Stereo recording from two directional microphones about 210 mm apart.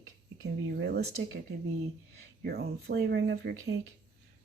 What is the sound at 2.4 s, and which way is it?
Speech, 50° right (ahead or behind).